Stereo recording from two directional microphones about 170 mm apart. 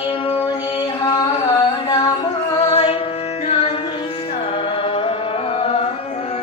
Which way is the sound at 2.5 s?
35° left (ahead or behind).